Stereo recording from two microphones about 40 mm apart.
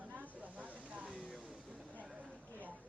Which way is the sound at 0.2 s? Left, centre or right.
Right.